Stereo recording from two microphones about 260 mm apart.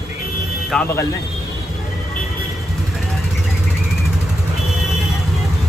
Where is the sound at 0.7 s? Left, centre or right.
Centre.